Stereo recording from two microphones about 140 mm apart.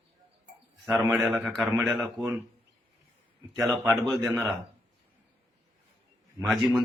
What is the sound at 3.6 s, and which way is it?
Speech, 20° right (ahead or behind).